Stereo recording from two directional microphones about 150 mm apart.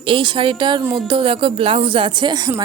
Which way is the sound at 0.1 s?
35° right (ahead or behind).